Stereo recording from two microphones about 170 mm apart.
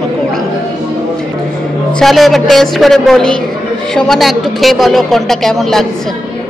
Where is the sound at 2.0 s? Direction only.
Centre (ahead or behind).